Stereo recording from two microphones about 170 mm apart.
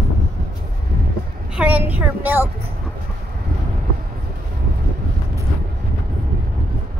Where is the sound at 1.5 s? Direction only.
10° right (ahead or behind).